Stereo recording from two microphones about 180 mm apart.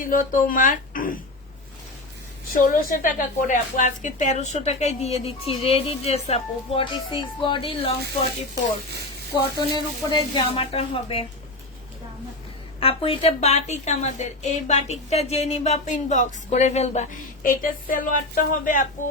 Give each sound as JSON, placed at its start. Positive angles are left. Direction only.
{"t": 0.0, "sound": "speech", "side_deg": 50}
{"t": 2.6, "sound": "a woman's voice", "side_deg": 45}
{"t": 9.6, "sound": "a woman's voice", "side_deg": 25}
{"t": 12.8, "sound": "a woman's voice", "side_deg": 30}